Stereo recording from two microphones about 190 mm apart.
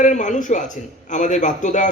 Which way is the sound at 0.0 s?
40° left (ahead or behind).